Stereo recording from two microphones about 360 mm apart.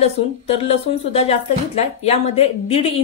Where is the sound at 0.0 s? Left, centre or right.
Centre.